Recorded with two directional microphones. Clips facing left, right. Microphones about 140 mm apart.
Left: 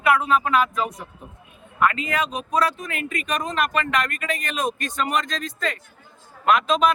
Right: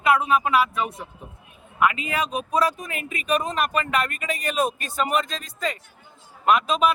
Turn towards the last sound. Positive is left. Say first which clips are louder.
# left 1 dB
turn(degrees=-10)  # may be behind; listen again after turning